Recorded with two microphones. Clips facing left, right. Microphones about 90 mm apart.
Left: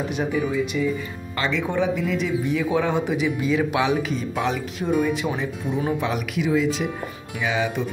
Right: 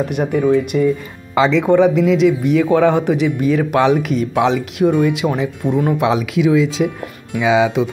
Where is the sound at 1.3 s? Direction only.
90° right.